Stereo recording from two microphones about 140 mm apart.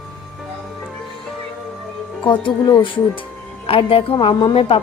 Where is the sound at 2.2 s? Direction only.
35° left (ahead or behind).